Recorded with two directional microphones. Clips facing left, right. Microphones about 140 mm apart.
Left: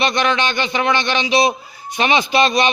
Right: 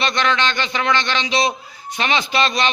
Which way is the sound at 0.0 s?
15° left (ahead or behind).